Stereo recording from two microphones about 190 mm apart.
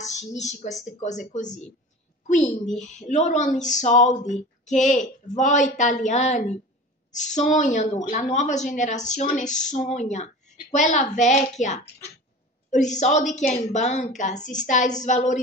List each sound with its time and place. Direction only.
0.0 s a woman's voice: 35° left (ahead or behind)
2.8 s a woman's voice: 40° left (ahead or behind)